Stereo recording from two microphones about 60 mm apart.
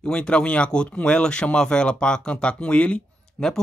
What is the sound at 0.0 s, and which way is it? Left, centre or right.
A man's voice, centre.